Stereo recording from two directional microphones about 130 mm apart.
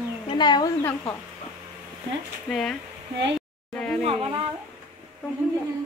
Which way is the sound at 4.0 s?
50° right (ahead or behind).